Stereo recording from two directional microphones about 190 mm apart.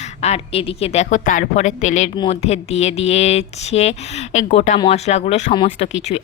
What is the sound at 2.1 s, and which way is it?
Speech, 25° left (ahead or behind).